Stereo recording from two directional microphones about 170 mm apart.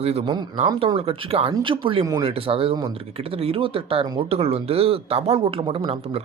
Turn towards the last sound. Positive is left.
turn(degrees=-35)  # may be behind; listen again after turning